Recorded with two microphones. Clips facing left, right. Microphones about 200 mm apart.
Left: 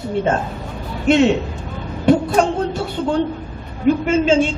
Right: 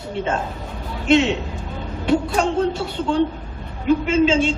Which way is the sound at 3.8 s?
50° left (ahead or behind).